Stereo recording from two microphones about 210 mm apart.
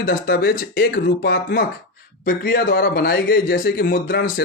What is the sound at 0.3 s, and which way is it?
Speech, 45° left (ahead or behind).